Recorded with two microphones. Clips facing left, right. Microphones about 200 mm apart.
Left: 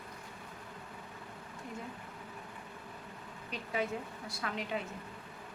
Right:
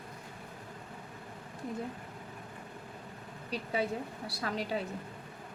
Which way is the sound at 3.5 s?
35° right (ahead or behind).